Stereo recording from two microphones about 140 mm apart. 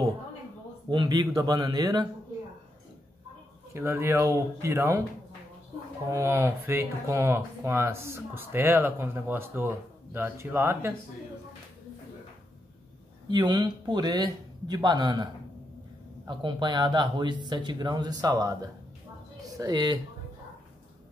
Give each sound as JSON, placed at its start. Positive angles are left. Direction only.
{"t": 0.8, "sound": "speech", "side_deg": -30}
{"t": 3.7, "sound": "speech", "side_deg": -20}
{"t": 6.1, "sound": "speech", "side_deg": -20}
{"t": 13.3, "sound": "speech", "side_deg": -30}
{"t": 16.3, "sound": "speech", "side_deg": -35}